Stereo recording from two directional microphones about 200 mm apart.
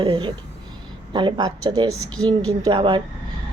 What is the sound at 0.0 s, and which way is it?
Speech, 25° right (ahead or behind).